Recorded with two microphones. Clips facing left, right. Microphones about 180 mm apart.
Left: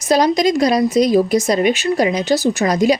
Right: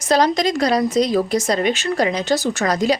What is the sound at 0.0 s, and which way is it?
Speech, 10° left (ahead or behind).